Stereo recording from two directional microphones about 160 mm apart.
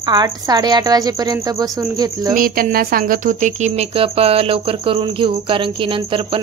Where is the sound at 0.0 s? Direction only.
25° right (ahead or behind).